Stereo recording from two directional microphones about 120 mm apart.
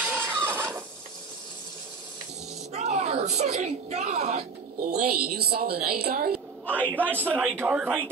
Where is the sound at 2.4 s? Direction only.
65° right (ahead or behind).